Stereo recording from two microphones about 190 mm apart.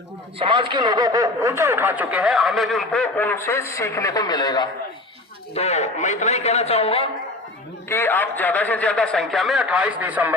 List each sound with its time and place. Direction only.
0.3 s a man's voice: 25° right (ahead or behind); by 4.7 s 20° left (ahead or behind)
5.5 s a man's voice: 35° left (ahead or behind)
7.9 s a man's voice: 10° left (ahead or behind); by 10.3 s 10° right (ahead or behind)